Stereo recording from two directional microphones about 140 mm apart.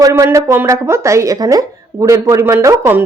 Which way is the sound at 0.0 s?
20° right (ahead or behind).